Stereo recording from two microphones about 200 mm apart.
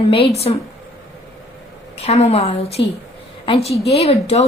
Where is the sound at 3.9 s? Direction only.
30° left (ahead or behind).